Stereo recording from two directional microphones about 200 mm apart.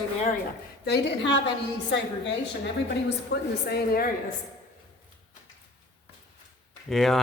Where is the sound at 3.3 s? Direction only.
55° left (ahead or behind).